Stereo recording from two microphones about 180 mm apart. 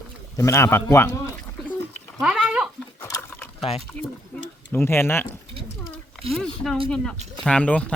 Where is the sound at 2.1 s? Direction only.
5° right (ahead or behind).